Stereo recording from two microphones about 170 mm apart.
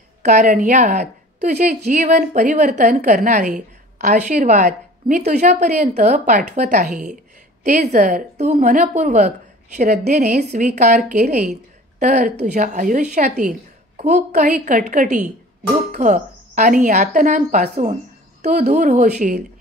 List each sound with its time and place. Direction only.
0.2 s a woman's voice: 45° right (ahead or behind)